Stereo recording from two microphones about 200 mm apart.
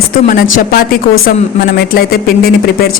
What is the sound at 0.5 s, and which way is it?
Speech, 45° left (ahead or behind).